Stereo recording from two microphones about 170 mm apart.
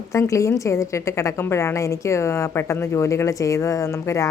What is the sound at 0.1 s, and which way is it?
A woman's voice, 15° left (ahead or behind).